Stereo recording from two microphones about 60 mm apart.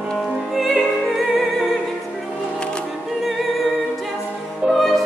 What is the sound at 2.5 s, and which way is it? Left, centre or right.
Music, centre.